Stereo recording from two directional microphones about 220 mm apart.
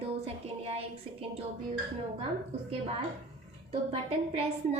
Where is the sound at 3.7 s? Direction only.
25° right (ahead or behind).